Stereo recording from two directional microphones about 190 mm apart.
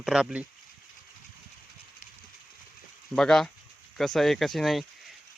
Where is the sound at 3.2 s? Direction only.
Centre (ahead or behind).